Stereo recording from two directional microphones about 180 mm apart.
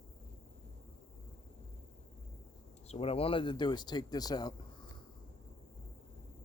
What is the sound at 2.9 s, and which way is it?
Speech, 35° left (ahead or behind).